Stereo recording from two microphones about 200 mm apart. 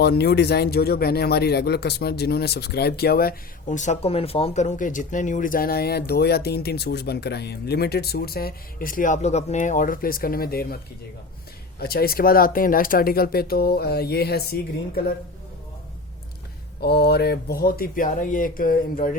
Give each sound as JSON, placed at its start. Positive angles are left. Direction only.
{"t": 0.0, "sound": "speech", "side_deg": 55}
{"t": 11.8, "sound": "speech", "side_deg": 50}
{"t": 16.8, "sound": "speech", "side_deg": 55}